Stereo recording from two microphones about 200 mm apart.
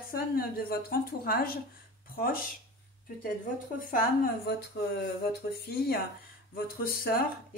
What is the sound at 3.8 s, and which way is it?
A woman's voice, 45° left (ahead or behind).